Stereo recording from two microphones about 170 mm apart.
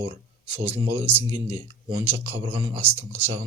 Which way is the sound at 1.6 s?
30° right (ahead or behind).